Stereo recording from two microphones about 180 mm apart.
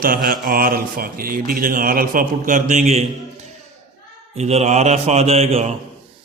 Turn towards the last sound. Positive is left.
turn(degrees=-35)  # may be behind; listen again after turning